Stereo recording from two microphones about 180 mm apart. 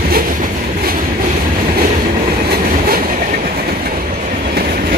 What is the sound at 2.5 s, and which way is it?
Train, 55° right (ahead or behind).